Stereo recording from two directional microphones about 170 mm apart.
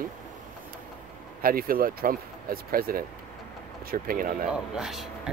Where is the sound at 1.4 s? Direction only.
60° right (ahead or behind).